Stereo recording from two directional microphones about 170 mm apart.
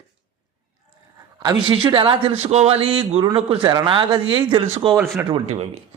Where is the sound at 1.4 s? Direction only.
25° right (ahead or behind).